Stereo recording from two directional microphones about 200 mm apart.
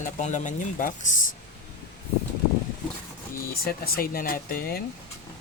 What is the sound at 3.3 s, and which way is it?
Speech, 50° left (ahead or behind).